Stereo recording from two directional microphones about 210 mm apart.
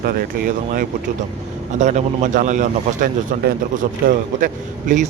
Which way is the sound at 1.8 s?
35° right (ahead or behind).